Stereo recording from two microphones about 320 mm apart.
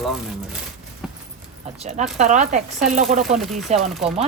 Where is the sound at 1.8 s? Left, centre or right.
Centre.